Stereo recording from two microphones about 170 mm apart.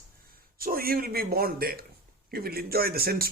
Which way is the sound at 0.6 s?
60° right (ahead or behind).